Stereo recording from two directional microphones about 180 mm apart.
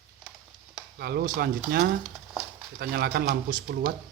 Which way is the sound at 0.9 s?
60° right (ahead or behind).